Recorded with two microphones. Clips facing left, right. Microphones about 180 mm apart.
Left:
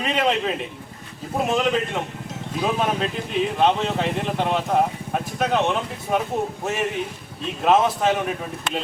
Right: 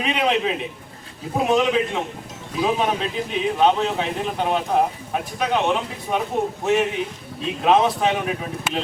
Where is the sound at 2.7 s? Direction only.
Centre (ahead or behind).